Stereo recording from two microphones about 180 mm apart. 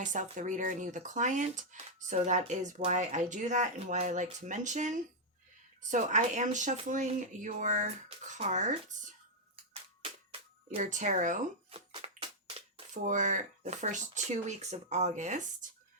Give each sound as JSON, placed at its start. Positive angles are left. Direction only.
{"t": 0.0, "sound": "speech", "side_deg": -45}
{"t": 10.0, "sound": "music", "side_deg": -30}
{"t": 12.9, "sound": "speech", "side_deg": -45}